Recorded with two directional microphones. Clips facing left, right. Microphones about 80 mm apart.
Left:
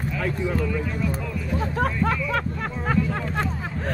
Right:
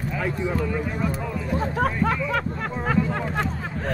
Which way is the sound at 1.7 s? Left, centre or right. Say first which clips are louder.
Even; centre.